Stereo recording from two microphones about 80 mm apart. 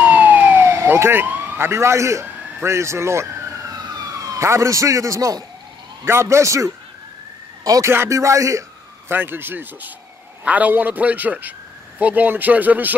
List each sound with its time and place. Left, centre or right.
0.0 s emergency vehicle: centre
0.6 s police car: right
1.2 s speech: right
3.7 s police car: right
6.0 s speech: right
7.6 s speech: right
7.9 s speech: right
9.1 s a man's voice: right